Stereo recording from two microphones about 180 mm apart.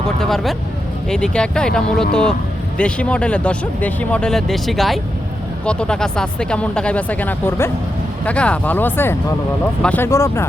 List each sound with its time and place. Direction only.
0.2 s speech: centre (ahead or behind)